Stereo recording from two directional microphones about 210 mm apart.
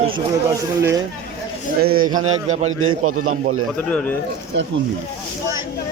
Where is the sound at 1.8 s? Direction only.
45° right (ahead or behind).